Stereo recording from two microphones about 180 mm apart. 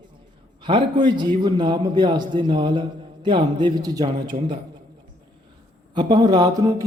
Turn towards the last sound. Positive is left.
turn(degrees=-20)  # may be behind; listen again after turning